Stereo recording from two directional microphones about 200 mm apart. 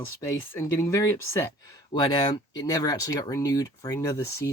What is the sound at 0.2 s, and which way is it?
Speech, 15° left (ahead or behind).